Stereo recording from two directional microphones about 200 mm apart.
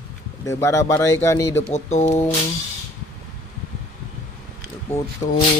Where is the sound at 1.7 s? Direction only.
35° left (ahead or behind).